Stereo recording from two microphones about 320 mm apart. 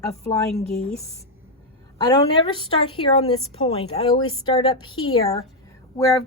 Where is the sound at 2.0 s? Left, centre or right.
Centre.